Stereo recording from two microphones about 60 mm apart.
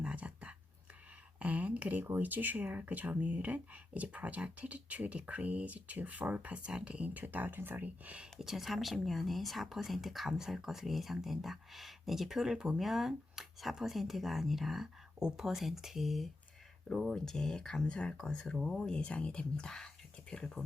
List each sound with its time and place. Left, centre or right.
0.0 s a sound: centre
1.4 s speech: right
8.0 s speech: centre
8.4 s speech: centre
17.1 s speech: centre
18.5 s speech: centre
18.8 s speech: centre